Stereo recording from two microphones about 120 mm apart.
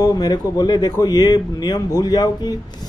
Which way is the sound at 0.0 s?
35° left (ahead or behind).